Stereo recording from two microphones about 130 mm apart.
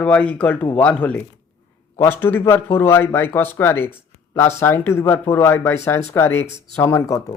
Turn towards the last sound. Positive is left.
turn(degrees=25)  # may be behind; listen again after turning